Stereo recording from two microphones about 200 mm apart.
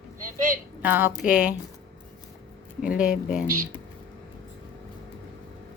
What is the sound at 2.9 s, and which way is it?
Speech, 5° right (ahead or behind).